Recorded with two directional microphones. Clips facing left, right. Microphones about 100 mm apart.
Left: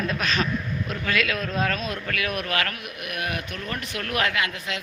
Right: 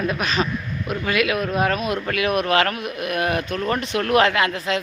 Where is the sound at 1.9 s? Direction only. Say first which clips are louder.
Right 7 dB; 25° right (ahead or behind).